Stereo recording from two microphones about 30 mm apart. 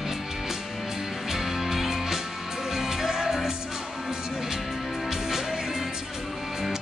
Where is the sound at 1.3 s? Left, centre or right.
Centre.